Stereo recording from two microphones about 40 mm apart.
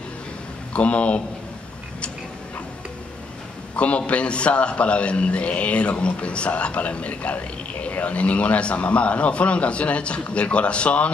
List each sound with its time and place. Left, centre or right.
0.7 s a man's voice: left
3.7 s a man's voice: left